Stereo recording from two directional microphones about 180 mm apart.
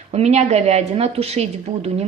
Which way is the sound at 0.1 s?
35° right (ahead or behind).